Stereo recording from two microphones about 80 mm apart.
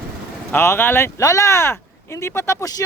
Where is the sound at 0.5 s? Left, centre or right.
Left.